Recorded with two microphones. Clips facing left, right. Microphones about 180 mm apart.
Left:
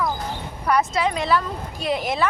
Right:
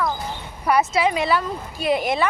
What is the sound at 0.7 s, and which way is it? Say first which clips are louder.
Speech: right 2 dB; 5° right (ahead or behind).